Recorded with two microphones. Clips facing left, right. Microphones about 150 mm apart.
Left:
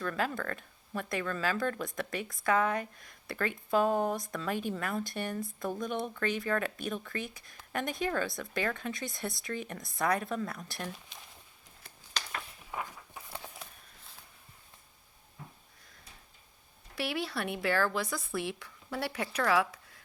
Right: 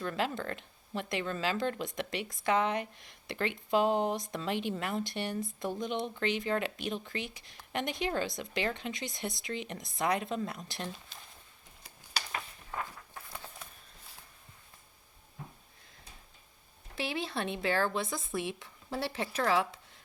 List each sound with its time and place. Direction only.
0.0 s speech: 25° right (ahead or behind)
11.1 s a sound: centre (ahead or behind)
12.7 s walk: 10° left (ahead or behind)
16.9 s speech: 20° right (ahead or behind)